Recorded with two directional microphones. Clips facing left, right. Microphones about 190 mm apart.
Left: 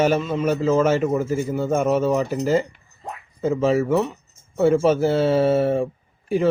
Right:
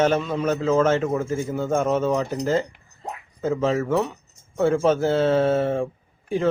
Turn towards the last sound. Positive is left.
turn(degrees=10)  # may be behind; listen again after turning